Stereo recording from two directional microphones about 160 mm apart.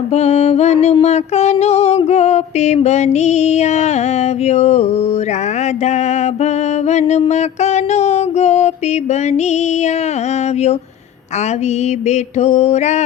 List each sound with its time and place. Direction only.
0.1 s mantra: 40° left (ahead or behind)
5.8 s music: 45° left (ahead or behind)
12.0 s mantra: 45° left (ahead or behind)